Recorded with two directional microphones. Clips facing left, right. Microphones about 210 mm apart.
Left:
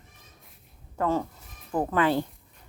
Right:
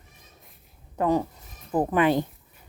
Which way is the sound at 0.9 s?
15° right (ahead or behind).